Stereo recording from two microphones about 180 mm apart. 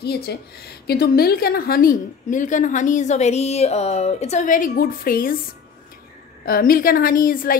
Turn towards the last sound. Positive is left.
turn(degrees=50)  # may be behind; listen again after turning